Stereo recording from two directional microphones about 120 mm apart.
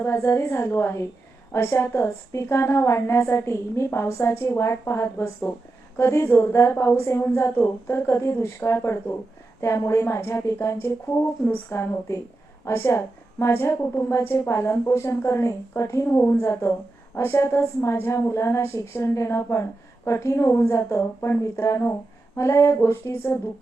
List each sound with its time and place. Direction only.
0.0 s a woman's voice: 20° left (ahead or behind)